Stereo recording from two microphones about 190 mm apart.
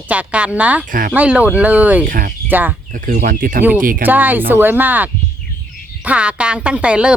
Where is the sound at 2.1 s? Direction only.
45° right (ahead or behind).